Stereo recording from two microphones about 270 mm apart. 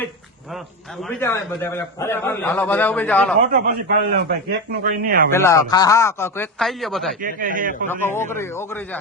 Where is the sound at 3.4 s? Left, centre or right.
Right.